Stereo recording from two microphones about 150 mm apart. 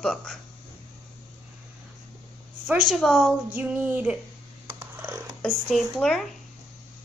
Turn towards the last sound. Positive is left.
turn(degrees=0)  # may be behind; listen again after turning